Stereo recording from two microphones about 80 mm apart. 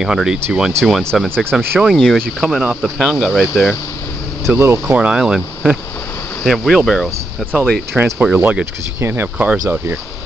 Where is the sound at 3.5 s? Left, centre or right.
Left.